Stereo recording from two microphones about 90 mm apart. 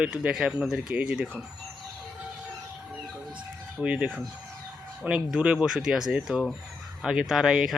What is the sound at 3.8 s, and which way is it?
Speech, 10° right (ahead or behind).